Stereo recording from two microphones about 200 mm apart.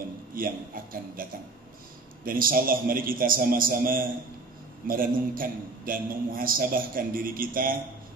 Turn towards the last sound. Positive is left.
turn(degrees=-45)  # may be behind; listen again after turning